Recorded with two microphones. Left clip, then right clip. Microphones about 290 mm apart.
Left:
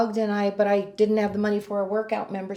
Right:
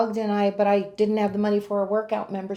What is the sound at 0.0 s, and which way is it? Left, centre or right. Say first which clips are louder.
Speech: right 1 dB; centre.